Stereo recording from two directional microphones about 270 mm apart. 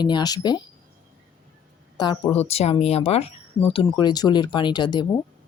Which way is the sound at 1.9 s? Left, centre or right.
Centre.